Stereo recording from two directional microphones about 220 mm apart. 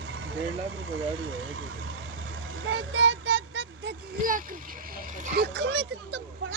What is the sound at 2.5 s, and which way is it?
A child's voice, 60° right (ahead or behind).